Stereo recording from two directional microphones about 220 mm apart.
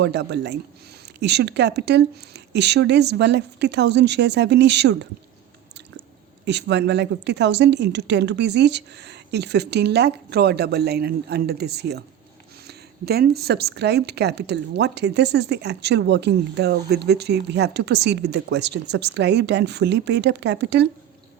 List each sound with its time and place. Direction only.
0.0 s speech: 50° right (ahead or behind)
6.4 s speech: 50° right (ahead or behind)